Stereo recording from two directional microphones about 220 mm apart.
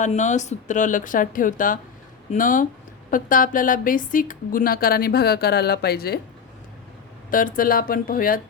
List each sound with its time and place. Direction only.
0.0 s speech: 35° left (ahead or behind)
7.3 s speech: 40° left (ahead or behind)